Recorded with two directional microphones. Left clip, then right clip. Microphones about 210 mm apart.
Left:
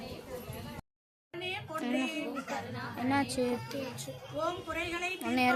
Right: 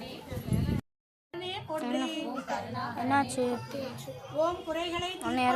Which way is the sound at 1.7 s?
10° left (ahead or behind).